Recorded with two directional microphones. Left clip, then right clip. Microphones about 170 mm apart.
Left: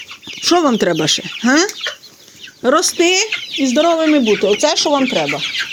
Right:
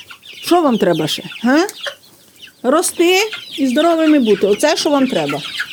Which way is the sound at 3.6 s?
20° right (ahead or behind).